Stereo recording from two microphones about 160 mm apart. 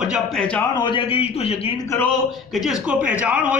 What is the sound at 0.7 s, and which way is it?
Speech, 30° left (ahead or behind).